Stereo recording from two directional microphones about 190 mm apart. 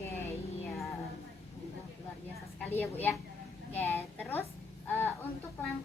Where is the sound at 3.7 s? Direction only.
10° left (ahead or behind).